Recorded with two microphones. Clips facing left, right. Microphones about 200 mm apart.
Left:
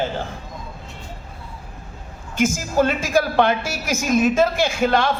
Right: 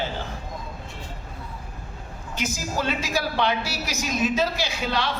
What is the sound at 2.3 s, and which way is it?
A woman's voice, 50° left (ahead or behind).